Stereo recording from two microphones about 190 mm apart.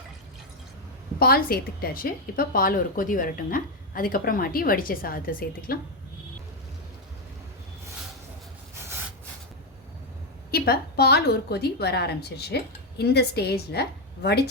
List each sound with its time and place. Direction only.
1.2 s a woman's voice: 55° left (ahead or behind)
10.5 s a woman's voice: 55° left (ahead or behind)